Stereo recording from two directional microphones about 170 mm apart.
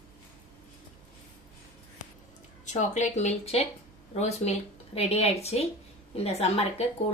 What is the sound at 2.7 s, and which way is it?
A woman's voice, 45° left (ahead or behind).